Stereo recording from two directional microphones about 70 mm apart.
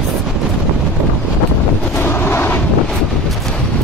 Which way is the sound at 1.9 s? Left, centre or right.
Left.